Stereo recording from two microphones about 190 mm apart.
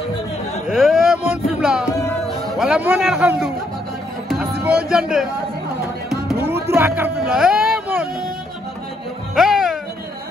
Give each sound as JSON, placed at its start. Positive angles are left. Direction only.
{"t": 0.7, "sound": "a sound", "side_deg": 0}
{"t": 1.6, "sound": "music", "side_deg": -5}
{"t": 1.9, "sound": "music", "side_deg": 15}
{"t": 2.6, "sound": "a man's voice", "side_deg": -5}
{"t": 4.9, "sound": "a man's voice", "side_deg": 0}
{"t": 6.3, "sound": "music", "side_deg": -10}
{"t": 9.3, "sound": "music", "side_deg": 0}